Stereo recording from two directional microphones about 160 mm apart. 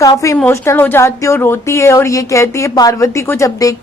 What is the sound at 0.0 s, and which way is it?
A woman's voice, 20° left (ahead or behind).